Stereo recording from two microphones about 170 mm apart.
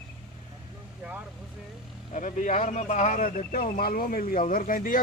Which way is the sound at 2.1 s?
45° left (ahead or behind).